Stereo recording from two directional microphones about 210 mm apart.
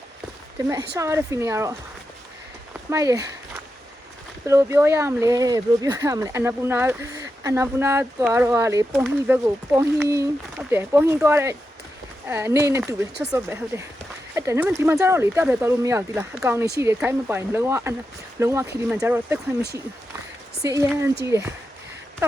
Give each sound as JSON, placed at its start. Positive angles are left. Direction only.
{"t": 0.9, "sound": "speech", "side_deg": -15}
{"t": 2.9, "sound": "speech", "side_deg": -15}
{"t": 4.4, "sound": "speech", "side_deg": -15}
{"t": 20.6, "sound": "speech", "side_deg": -15}